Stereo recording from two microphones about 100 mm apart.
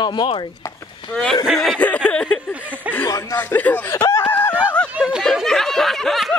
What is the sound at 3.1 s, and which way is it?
Speech, 35° left (ahead or behind).